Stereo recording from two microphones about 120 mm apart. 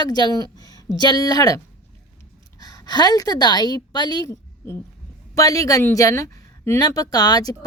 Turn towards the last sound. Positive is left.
turn(degrees=35)  # may be behind; listen again after turning